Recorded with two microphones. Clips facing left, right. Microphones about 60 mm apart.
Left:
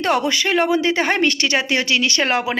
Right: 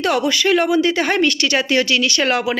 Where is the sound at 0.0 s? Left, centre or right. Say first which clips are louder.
Right 1 dB; left.